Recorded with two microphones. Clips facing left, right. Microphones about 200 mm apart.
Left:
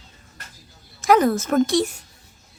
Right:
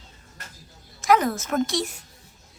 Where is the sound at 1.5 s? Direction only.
55° left (ahead or behind).